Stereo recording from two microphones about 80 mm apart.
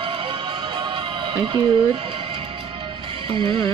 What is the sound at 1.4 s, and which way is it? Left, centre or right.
Speech, right.